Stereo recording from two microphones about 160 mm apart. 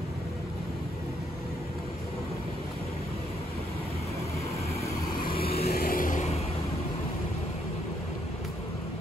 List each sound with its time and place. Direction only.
5.1 s vehicle: 65° left (ahead or behind); by 6.4 s 45° left (ahead or behind)